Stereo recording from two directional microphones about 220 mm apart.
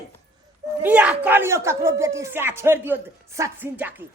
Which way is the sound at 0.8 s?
5° right (ahead or behind).